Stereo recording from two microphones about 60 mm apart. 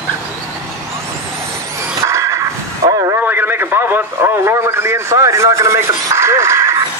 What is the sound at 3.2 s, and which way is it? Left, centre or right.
A man's voice, right.